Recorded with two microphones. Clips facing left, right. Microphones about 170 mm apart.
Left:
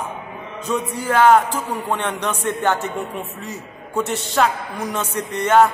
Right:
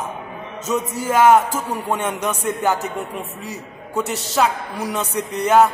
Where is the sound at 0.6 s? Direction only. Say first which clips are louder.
Right 1 dB; 40° right (ahead or behind).